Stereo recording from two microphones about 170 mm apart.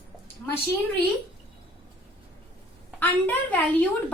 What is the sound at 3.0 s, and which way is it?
Speech, 10° left (ahead or behind).